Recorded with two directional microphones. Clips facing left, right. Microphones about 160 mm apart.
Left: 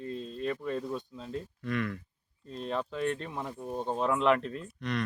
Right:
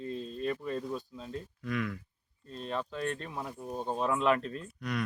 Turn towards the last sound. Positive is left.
turn(degrees=-5)  # may be behind; listen again after turning